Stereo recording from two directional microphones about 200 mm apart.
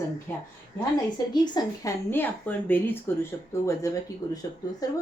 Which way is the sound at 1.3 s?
20° left (ahead or behind).